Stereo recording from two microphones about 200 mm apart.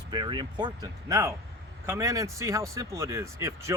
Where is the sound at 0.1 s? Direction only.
20° right (ahead or behind).